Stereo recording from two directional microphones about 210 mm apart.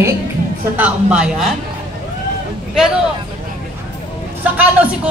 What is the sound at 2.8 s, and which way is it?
Speech, 5° right (ahead or behind).